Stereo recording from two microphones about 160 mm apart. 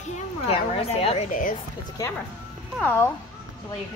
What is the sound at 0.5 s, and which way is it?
Speech, 40° left (ahead or behind).